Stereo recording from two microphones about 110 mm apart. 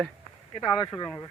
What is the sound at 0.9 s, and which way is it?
Speech, 40° left (ahead or behind).